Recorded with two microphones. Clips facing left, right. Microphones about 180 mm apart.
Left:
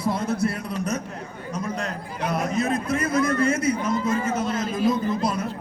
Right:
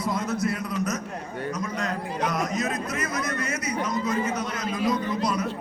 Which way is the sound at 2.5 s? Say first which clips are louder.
Left 5 dB; 30° left (ahead or behind).